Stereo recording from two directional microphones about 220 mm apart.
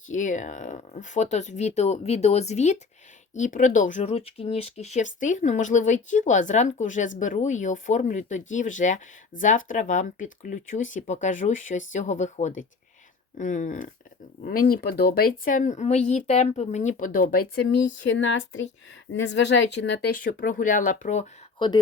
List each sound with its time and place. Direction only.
0.1 s speech: 35° left (ahead or behind)
18.0 s speech: 55° left (ahead or behind)
20.1 s speech: 40° left (ahead or behind)